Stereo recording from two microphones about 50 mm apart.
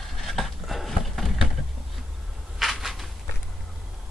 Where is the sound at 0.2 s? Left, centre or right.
Centre.